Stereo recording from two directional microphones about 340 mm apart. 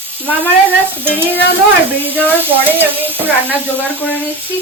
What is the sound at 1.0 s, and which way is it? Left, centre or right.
Frying, centre.